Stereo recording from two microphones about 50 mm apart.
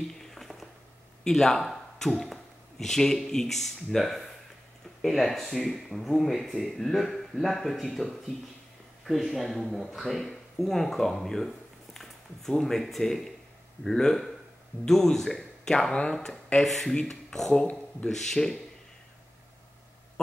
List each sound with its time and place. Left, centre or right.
0.2 s a sound: centre
1.2 s speech: centre
17.5 s speech: centre
18.1 s speech: centre